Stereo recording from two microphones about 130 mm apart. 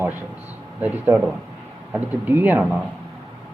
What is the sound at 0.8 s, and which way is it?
A man's voice, 10° right (ahead or behind).